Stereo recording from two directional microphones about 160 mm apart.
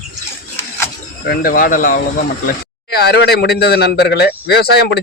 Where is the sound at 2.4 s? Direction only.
80° left.